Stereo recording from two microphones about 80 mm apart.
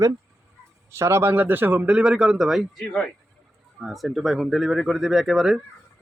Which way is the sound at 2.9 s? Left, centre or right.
Centre.